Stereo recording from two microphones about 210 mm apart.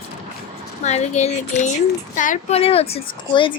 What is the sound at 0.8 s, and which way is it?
Speech, 30° left (ahead or behind).